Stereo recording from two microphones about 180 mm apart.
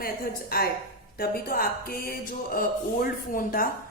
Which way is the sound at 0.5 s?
55° left (ahead or behind).